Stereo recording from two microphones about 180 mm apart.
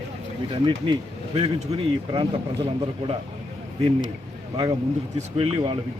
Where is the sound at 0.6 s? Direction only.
30° right (ahead or behind).